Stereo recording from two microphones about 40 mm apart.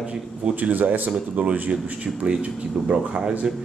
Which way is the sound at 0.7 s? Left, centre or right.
Right.